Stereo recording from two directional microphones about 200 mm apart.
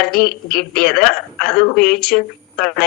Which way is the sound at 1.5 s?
50° left (ahead or behind).